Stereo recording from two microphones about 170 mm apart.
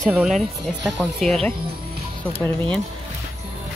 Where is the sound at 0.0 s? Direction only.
5° right (ahead or behind).